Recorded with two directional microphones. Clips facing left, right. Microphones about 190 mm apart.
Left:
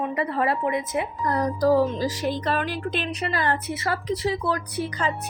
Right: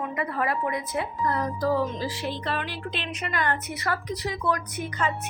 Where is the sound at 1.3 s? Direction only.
40° left (ahead or behind).